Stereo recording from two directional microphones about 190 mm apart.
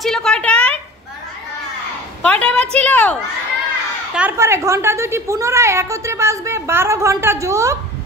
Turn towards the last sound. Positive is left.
turn(degrees=-15)  # may be behind; listen again after turning